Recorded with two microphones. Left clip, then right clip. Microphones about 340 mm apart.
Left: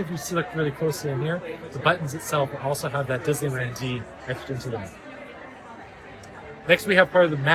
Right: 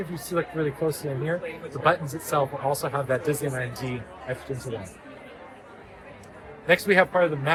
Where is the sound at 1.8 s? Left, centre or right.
Centre.